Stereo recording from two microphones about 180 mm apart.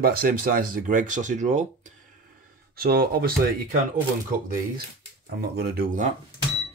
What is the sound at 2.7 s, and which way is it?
Speech, 60° right (ahead or behind).